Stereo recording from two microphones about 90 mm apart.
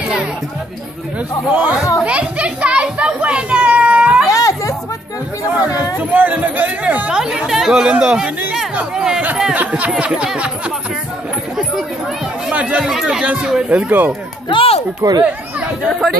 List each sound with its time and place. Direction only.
1.5 s speech: 15° right (ahead or behind)
2.0 s a sound: 15° right (ahead or behind)
4.3 s chatter: 40° left (ahead or behind)
5.9 s speech: 15° right (ahead or behind)
12.4 s speech: 10° right (ahead or behind)
14.5 s speech: 90° left
15.0 s speech: 45° right (ahead or behind)
15.8 s speech: centre (ahead or behind)